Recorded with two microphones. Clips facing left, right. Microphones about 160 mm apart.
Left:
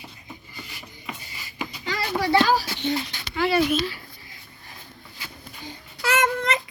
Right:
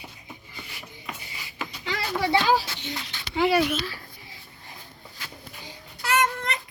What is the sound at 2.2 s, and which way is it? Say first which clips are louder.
Speech: left 2 dB; 20° right (ahead or behind).